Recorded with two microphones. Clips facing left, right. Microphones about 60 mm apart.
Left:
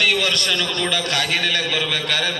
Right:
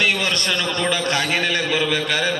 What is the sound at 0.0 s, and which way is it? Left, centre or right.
A man's voice, right.